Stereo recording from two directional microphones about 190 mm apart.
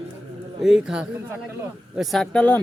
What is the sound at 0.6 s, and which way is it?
Speech, centre (ahead or behind).